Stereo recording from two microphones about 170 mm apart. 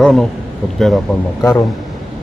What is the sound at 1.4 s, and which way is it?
Speech, 20° left (ahead or behind).